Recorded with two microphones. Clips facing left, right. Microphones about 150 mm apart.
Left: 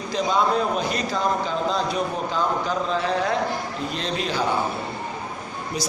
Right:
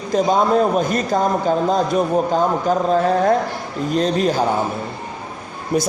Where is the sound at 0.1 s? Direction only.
45° right (ahead or behind).